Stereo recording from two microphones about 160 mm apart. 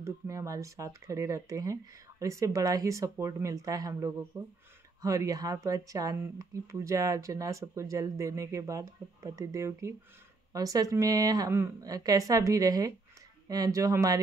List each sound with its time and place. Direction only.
0.0 s speech: 20° right (ahead or behind)